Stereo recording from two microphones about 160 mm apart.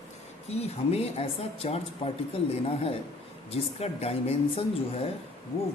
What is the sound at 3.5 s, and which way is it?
A woman's voice, 40° left (ahead or behind).